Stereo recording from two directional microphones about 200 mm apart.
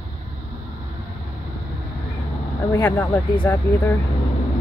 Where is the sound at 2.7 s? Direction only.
10° left (ahead or behind).